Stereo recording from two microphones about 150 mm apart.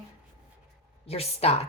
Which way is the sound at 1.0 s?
40° left (ahead or behind).